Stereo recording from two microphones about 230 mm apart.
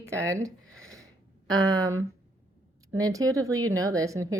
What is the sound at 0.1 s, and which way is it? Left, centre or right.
Speech, centre.